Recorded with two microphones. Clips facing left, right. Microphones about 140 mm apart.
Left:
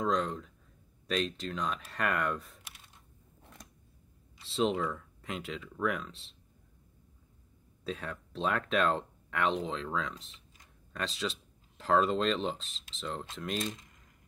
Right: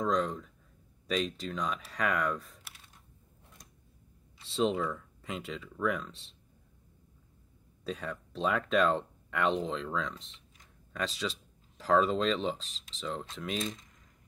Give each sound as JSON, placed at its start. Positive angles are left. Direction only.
{"t": 0.0, "sound": "speech", "side_deg": 0}
{"t": 4.4, "sound": "speech", "side_deg": 0}
{"t": 7.8, "sound": "speech", "side_deg": 0}